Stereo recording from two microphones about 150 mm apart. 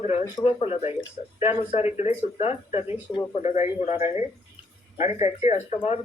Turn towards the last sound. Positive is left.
turn(degrees=45)  # may be behind; listen again after turning